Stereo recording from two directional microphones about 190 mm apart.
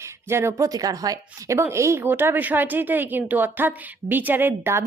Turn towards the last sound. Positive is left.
turn(degrees=-15)  # may be behind; listen again after turning